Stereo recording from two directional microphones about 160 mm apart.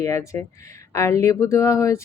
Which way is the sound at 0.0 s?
20° left (ahead or behind).